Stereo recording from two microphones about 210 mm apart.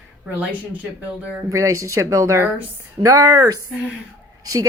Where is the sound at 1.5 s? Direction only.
15° right (ahead or behind).